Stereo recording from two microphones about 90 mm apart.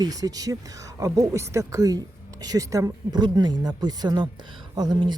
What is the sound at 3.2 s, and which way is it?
Speech, 55° right (ahead or behind).